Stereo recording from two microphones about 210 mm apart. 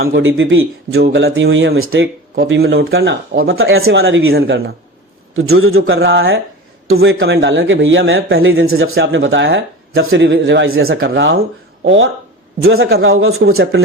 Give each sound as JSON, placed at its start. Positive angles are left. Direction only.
{"t": 0.0, "sound": "speech", "side_deg": -50}
{"t": 0.3, "sound": "a man's voice", "side_deg": -70}
{"t": 0.9, "sound": "speech", "side_deg": -55}
{"t": 2.3, "sound": "a man's voice", "side_deg": -50}
{"t": 8.8, "sound": "speech", "side_deg": -65}
{"t": 11.9, "sound": "a man's voice", "side_deg": -70}